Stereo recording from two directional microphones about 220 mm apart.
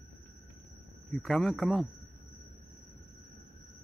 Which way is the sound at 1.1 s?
Centre (ahead or behind).